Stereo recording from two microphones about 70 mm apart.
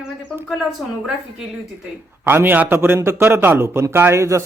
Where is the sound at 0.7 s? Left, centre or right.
Centre.